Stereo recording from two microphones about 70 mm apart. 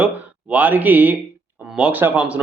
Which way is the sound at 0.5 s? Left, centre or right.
Right.